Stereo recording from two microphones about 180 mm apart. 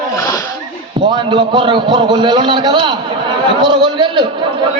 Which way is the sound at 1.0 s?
25° right (ahead or behind).